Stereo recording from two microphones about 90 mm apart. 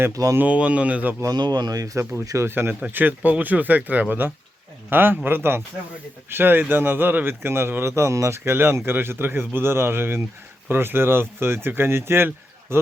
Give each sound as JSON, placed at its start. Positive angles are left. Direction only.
{"t": 0.1, "sound": "speech", "side_deg": -40}
{"t": 0.3, "sound": "speech", "side_deg": -15}
{"t": 1.2, "sound": "speech", "side_deg": -45}